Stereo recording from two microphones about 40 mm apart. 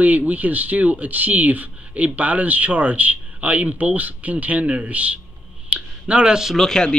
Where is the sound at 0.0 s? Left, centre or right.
Right.